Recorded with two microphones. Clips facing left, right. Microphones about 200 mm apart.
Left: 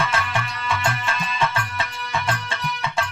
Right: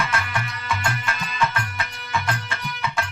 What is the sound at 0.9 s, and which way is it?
Music, 25° left (ahead or behind).